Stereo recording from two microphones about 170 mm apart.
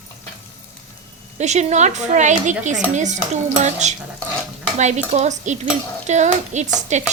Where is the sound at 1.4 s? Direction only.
45° right (ahead or behind).